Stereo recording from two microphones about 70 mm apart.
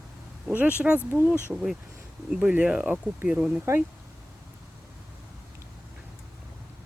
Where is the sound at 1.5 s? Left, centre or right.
Centre.